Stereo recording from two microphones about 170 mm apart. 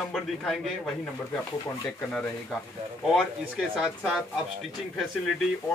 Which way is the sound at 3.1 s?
Centre (ahead or behind).